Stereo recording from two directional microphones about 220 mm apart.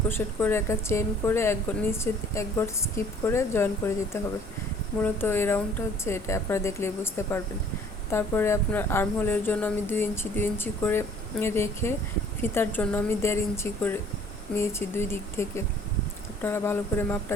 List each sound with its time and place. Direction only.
0.1 s speech: 10° left (ahead or behind)